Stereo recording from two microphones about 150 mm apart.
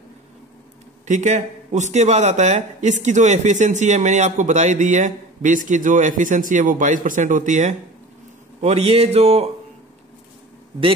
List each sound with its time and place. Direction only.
1.0 s a man's voice: 55° right (ahead or behind)